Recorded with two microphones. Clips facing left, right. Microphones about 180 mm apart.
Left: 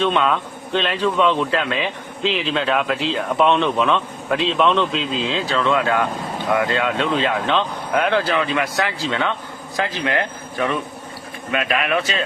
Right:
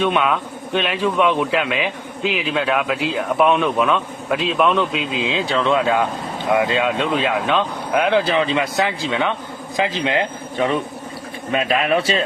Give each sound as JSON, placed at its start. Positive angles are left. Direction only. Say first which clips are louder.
{"t": 0.0, "sound": "a man's voice", "louder": "even", "side_deg": -10}